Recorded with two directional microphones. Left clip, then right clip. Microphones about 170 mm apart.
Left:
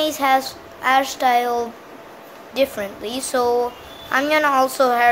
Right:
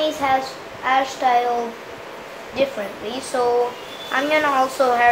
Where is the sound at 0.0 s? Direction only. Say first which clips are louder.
Left 2 dB; 45° left (ahead or behind).